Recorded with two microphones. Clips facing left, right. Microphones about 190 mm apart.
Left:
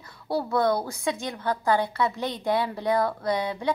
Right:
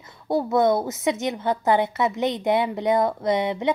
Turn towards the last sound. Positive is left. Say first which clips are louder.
# right 4 dB
turn(degrees=-20)  # may be behind; listen again after turning